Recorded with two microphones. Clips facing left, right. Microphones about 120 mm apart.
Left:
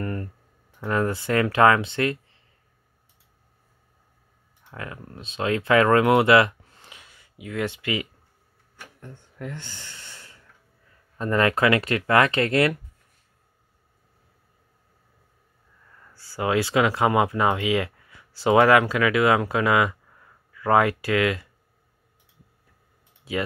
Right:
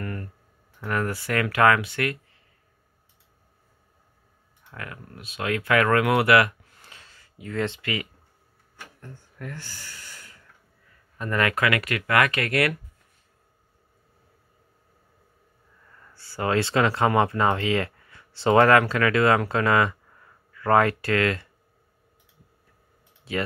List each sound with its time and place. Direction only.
0.0 s clicking: 30° left (ahead or behind)
0.7 s speech: 20° left (ahead or behind)
4.6 s speech: 20° left (ahead or behind)
9.0 s snort: 20° left (ahead or behind)
11.1 s speech: 30° left (ahead or behind)
16.0 s speech: 10° left (ahead or behind)